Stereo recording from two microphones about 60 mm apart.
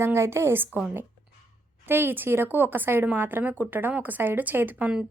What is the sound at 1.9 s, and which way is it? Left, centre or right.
A woman's voice, right.